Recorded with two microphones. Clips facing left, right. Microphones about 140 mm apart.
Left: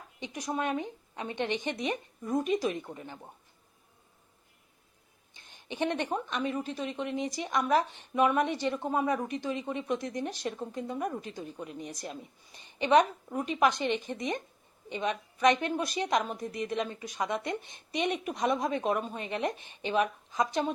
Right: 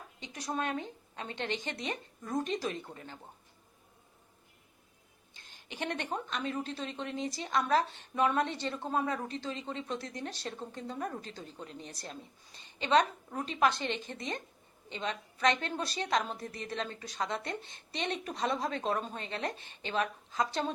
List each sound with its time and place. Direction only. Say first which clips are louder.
0.2 s a woman's voice: left 3 dB; 15° left (ahead or behind)
5.3 s a woman's voice: left 7 dB; 20° left (ahead or behind)